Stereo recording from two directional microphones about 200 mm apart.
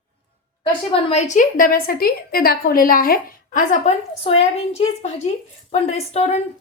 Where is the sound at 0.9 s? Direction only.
30° left (ahead or behind).